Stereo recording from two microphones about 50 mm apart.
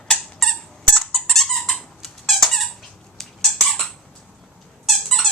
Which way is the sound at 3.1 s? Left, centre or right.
Centre.